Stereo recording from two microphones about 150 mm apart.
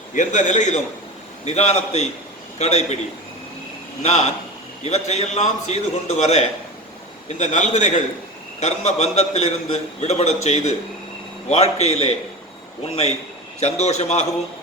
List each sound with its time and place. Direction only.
0.1 s a man's voice: 55° left (ahead or behind)
4.0 s a man's voice: 45° left (ahead or behind)
13.6 s a man's voice: 45° left (ahead or behind)